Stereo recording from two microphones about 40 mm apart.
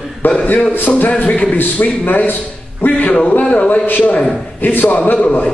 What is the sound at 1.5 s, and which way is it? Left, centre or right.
A man's voice, left.